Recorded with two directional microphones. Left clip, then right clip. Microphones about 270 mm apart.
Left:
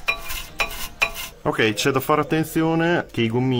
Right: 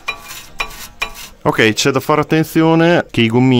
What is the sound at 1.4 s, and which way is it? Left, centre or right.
Speech, right.